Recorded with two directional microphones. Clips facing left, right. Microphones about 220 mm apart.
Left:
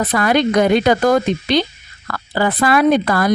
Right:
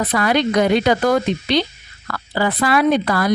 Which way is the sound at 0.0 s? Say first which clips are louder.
Left 2 dB; 45° left (ahead or behind).